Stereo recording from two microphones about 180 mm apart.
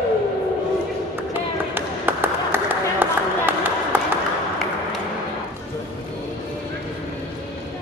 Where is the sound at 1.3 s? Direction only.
10° right (ahead or behind).